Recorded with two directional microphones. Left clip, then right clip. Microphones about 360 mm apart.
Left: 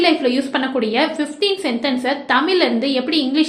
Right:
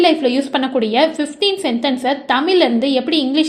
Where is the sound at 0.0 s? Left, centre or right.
Right.